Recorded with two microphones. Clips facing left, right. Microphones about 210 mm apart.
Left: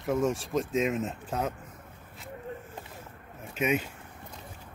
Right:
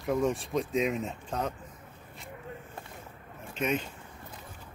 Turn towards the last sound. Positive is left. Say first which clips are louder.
# left 2 dB
turn(degrees=10)  # may be behind; listen again after turning